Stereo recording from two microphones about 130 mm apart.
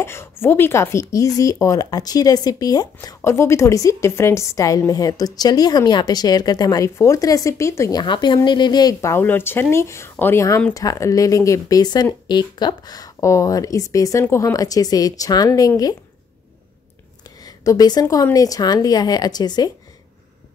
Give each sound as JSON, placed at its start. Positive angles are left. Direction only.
{"t": 0.0, "sound": "speech", "side_deg": 20}
{"t": 3.2, "sound": "speech", "side_deg": 20}
{"t": 8.0, "sound": "speech", "side_deg": 35}
{"t": 17.4, "sound": "speech", "side_deg": 30}